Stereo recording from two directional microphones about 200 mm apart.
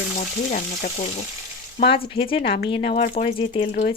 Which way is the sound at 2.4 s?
45° left (ahead or behind).